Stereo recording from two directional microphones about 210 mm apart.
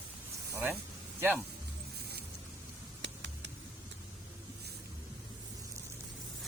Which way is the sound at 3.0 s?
60° right (ahead or behind).